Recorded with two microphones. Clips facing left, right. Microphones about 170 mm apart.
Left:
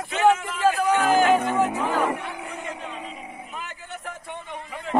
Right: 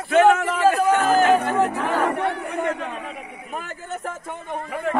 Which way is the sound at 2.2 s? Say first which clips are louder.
Right 10 dB; 70° right (ahead or behind).